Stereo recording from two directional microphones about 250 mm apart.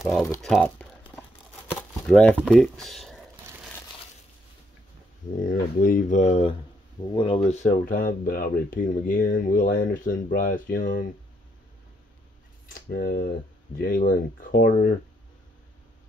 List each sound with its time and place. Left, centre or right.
0.0 s speech: centre
1.7 s a sound: centre
5.5 s speech: left
12.9 s speech: left